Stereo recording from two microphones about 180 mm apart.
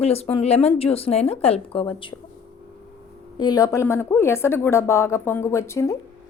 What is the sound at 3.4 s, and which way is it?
A woman's voice, 20° left (ahead or behind).